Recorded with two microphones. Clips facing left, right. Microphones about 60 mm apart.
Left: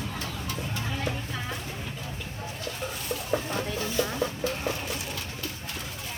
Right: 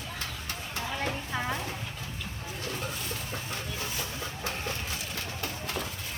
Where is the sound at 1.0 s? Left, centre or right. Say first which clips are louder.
Right 1 dB; right.